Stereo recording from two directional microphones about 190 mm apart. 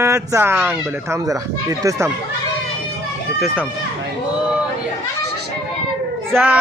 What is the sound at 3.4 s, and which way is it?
Speech, centre (ahead or behind).